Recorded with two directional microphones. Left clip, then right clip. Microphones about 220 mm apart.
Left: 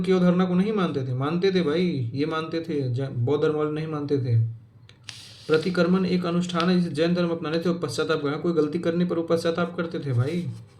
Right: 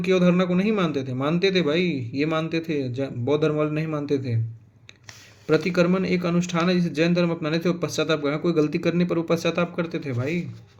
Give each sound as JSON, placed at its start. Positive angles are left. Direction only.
{"t": 0.0, "sound": "a man's voice", "side_deg": -40}
{"t": 5.5, "sound": "a man's voice", "side_deg": -40}